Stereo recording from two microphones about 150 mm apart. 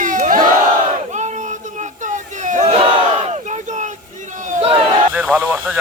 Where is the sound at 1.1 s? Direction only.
50° right (ahead or behind).